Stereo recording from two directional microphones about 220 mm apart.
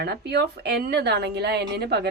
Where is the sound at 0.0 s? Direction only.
50° right (ahead or behind).